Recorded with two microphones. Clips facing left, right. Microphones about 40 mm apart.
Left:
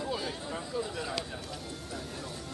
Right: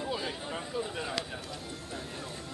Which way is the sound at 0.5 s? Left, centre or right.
Right.